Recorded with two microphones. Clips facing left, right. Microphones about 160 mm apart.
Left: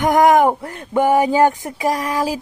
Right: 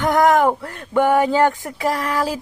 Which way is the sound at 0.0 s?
15° left (ahead or behind).